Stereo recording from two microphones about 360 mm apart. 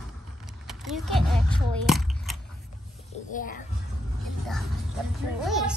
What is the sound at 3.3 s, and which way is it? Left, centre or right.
Speech, left.